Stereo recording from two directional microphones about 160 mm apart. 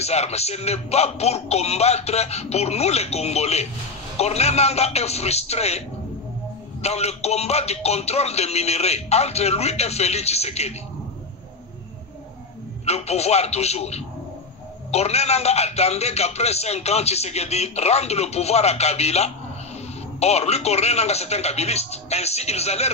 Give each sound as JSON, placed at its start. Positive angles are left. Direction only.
{"t": 0.0, "sound": "speech", "side_deg": 40}
{"t": 12.8, "sound": "speech", "side_deg": 40}